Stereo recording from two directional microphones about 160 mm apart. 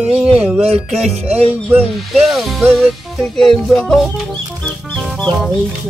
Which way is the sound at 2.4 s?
Centre (ahead or behind).